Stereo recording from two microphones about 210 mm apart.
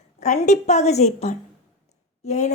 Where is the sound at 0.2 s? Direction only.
35° left (ahead or behind).